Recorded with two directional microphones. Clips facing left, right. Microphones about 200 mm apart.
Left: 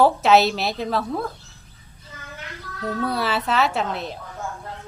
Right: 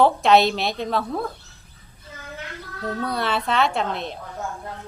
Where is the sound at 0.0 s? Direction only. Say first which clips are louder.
Even; 5° left (ahead or behind).